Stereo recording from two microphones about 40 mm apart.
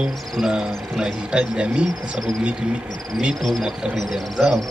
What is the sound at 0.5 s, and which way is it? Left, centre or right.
Speech, centre.